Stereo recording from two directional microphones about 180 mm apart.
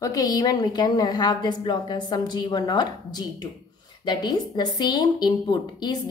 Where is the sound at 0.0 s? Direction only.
20° left (ahead or behind).